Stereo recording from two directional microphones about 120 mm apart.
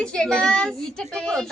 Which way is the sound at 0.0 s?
5° left (ahead or behind).